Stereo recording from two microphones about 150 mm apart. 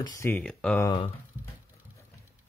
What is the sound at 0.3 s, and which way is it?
Speech, 5° left (ahead or behind).